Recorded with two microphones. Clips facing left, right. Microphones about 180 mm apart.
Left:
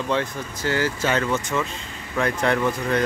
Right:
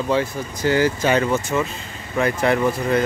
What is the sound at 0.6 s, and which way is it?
Speech, 15° right (ahead or behind).